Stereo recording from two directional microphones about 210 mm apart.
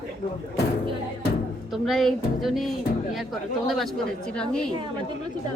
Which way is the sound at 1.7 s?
Centre (ahead or behind).